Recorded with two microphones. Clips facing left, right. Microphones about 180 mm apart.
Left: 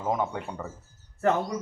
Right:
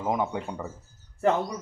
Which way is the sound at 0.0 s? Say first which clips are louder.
Right 1 dB; 15° right (ahead or behind).